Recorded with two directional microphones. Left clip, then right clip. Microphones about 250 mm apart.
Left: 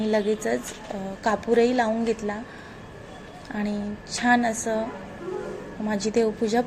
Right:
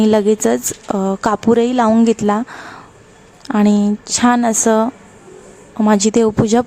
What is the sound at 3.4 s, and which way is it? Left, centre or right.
A woman's voice, right.